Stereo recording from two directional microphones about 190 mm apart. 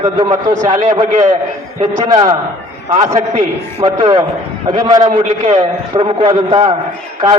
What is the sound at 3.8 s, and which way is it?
A man's voice, 25° right (ahead or behind).